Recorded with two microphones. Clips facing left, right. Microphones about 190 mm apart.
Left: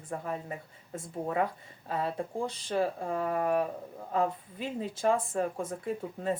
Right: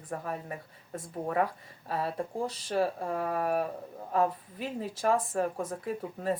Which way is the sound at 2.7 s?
25° left (ahead or behind).